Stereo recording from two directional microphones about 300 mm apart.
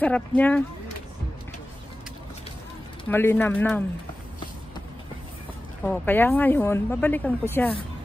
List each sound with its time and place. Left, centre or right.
0.0 s speech: centre
3.1 s speech: centre
5.9 s speech: centre